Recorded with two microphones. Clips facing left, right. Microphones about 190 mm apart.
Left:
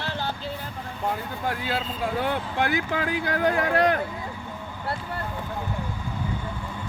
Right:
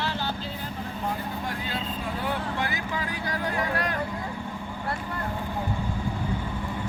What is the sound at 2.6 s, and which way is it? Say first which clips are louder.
Speech: left 5 dB; 60° left (ahead or behind).